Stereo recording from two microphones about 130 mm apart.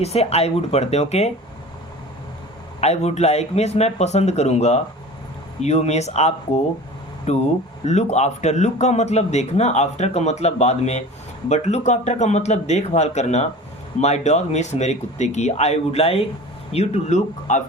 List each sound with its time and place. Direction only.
0.0 s speech: 55° left (ahead or behind)
2.8 s speech: 55° left (ahead or behind)